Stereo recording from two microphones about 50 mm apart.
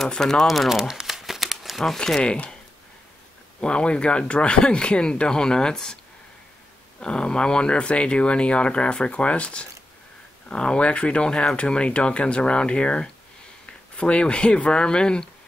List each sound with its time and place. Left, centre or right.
0.1 s speech: centre
0.5 s crumpling: centre
2.2 s speech: left
3.6 s speech: centre
7.0 s speech: centre